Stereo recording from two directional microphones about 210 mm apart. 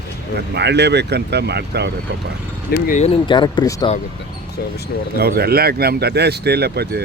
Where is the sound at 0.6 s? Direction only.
55° right (ahead or behind).